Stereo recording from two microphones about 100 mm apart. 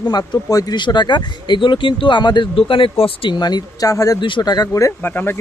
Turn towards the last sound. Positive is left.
turn(degrees=20)  # may be behind; listen again after turning